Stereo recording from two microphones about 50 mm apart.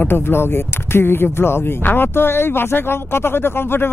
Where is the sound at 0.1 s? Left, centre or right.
Left.